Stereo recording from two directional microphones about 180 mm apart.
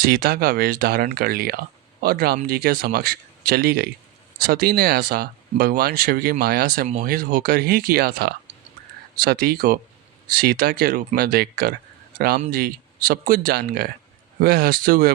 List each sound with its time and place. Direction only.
0.0 s speech: 55° right (ahead or behind)